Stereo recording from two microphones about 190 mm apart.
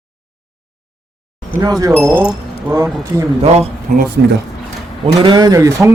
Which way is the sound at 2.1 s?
10° left (ahead or behind).